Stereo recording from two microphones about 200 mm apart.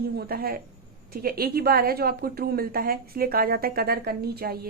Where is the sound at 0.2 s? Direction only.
50° right (ahead or behind).